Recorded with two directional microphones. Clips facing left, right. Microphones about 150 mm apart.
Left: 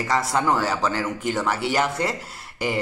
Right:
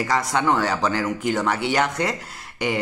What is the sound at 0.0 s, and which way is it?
Speech, centre (ahead or behind).